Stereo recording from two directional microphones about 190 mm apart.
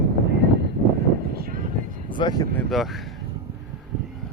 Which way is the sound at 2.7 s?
Centre (ahead or behind).